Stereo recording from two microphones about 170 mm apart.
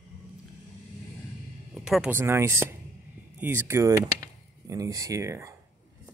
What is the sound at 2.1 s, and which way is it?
Speech, 15° right (ahead or behind).